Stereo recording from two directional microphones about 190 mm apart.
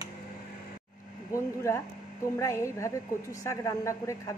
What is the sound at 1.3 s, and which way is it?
A woman's voice, 15° left (ahead or behind).